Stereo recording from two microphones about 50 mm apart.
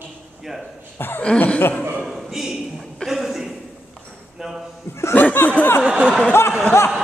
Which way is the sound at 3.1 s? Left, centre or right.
Centre.